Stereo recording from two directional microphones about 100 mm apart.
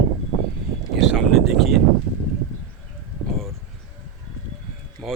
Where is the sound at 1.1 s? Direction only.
5° left (ahead or behind).